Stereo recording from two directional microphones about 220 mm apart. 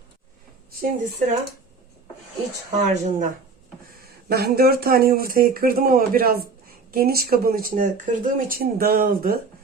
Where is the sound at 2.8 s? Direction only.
35° right (ahead or behind).